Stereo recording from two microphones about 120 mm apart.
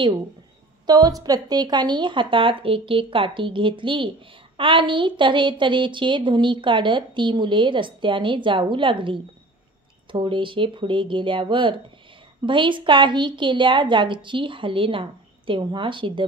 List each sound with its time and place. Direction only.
0.8 s a woman's voice: 30° right (ahead or behind)